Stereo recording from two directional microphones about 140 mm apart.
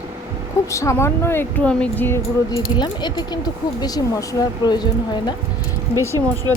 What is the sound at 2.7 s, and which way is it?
Speech, 30° left (ahead or behind).